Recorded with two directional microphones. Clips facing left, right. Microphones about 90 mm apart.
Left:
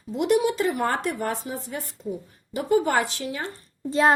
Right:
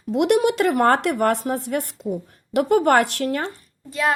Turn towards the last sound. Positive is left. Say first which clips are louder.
# left 3 dB
turn(degrees=30)  # may be behind; listen again after turning